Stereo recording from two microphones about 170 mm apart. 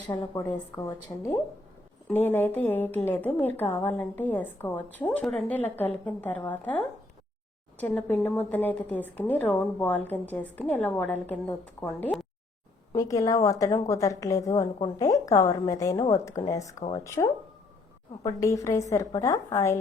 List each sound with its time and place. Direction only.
0.3 s a woman's voice: 20° left (ahead or behind)
2.0 s a woman's voice: 10° left (ahead or behind)
12.9 s a woman's voice: 20° left (ahead or behind)